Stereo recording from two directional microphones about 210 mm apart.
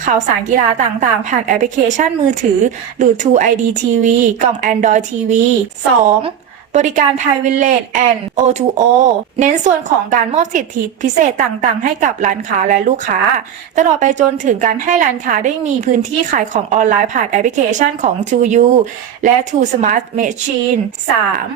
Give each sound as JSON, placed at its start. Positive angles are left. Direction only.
{"t": 0.0, "sound": "a woman's voice", "side_deg": -35}
{"t": 6.7, "sound": "a woman's voice", "side_deg": -35}